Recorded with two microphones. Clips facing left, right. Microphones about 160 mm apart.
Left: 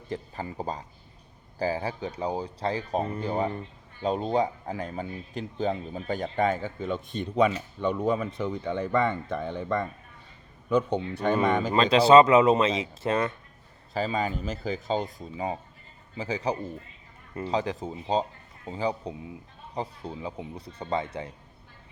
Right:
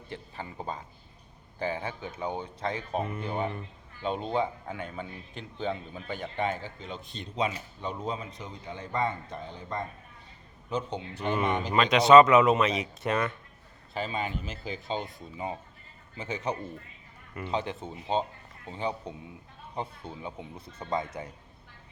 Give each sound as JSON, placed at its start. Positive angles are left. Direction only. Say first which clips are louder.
{"t": 0.1, "sound": "speech", "louder": "left 6 dB", "side_deg": 35}
{"t": 11.7, "sound": "speech", "louder": "left 1 dB", "side_deg": 30}
{"t": 16.1, "sound": "speech", "louder": "left 4 dB", "side_deg": 35}